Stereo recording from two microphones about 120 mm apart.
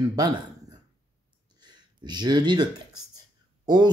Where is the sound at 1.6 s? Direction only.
35° right (ahead or behind).